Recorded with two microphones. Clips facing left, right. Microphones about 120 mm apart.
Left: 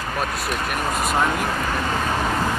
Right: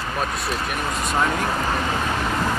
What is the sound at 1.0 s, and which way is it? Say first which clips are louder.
Speech: even; 10° left (ahead or behind).